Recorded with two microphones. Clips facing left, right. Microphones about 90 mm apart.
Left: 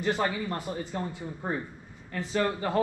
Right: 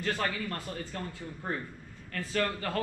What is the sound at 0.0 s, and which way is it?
Speech, 15° left (ahead or behind).